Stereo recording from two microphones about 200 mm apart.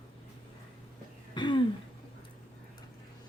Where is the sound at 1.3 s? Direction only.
25° left (ahead or behind).